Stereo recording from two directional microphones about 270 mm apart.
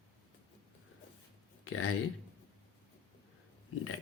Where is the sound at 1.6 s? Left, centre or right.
Left.